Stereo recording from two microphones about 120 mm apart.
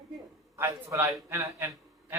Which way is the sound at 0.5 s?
25° right (ahead or behind).